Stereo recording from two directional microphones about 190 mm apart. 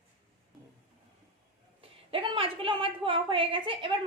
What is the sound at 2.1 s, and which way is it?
A woman's voice, 30° right (ahead or behind).